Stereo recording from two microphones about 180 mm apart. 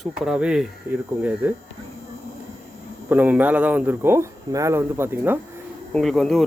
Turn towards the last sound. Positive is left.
turn(degrees=0)  # may be behind; listen again after turning